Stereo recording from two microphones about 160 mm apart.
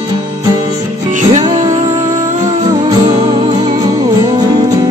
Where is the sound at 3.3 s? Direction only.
45° right (ahead or behind).